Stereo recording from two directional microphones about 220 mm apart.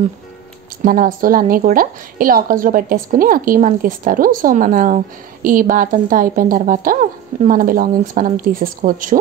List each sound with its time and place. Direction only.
0.8 s a woman's voice: 40° right (ahead or behind)